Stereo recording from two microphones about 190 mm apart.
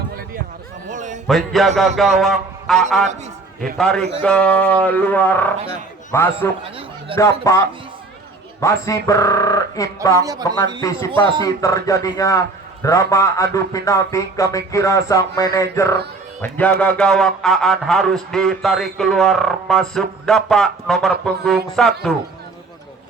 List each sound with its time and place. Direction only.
0.9 s a sound: 40° right (ahead or behind)
1.3 s a man's voice: centre (ahead or behind)
8.8 s a man's voice: 15° left (ahead or behind); by 22.1 s centre (ahead or behind)